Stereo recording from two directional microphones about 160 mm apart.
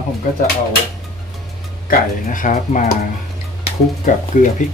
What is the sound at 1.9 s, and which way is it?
Speech, 60° left (ahead or behind).